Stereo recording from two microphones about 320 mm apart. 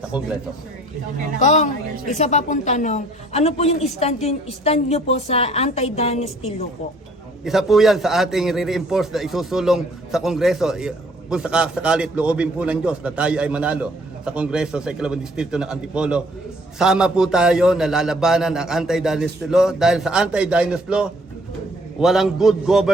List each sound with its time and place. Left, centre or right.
1.4 s a woman's voice: left
7.4 s a man's voice: centre